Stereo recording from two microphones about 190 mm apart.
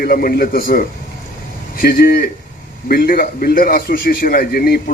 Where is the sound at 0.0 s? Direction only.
50° left (ahead or behind).